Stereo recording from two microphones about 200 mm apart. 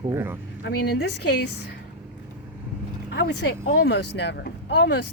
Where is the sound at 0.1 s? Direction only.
10° right (ahead or behind).